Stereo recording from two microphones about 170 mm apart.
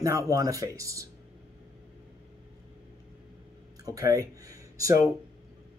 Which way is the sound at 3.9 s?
20° right (ahead or behind).